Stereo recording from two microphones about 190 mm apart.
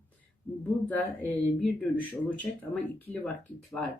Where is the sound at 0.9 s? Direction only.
10° left (ahead or behind).